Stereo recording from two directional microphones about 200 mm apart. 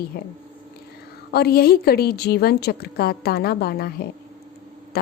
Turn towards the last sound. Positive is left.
turn(degrees=50)  # may be behind; listen again after turning